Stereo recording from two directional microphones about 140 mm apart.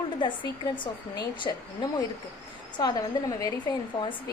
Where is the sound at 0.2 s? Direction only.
35° left (ahead or behind).